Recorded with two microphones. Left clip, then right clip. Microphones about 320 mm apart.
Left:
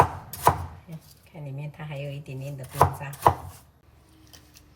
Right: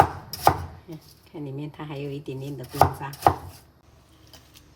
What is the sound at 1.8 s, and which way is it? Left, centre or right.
Speech, centre.